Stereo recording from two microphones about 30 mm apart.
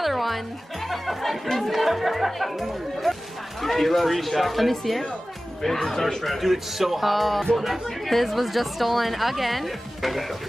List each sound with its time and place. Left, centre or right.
0.0 s music: centre
0.8 s speech: centre
6.2 s speech: centre